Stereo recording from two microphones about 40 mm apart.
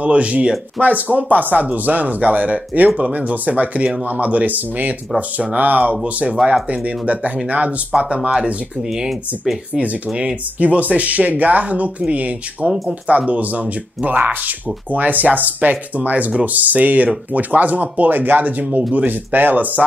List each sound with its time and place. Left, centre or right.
0.0 s speech: right
8.2 s speech: centre
9.8 s speech: right
12.6 s speech: centre
13.3 s speech: right
18.9 s speech: right